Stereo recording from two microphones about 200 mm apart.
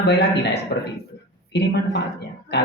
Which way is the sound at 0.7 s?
35° left (ahead or behind).